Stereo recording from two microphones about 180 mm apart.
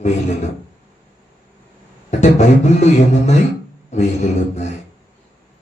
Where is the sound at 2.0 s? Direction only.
40° left (ahead or behind).